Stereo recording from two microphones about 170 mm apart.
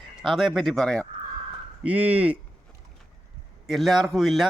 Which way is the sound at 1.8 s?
10° right (ahead or behind).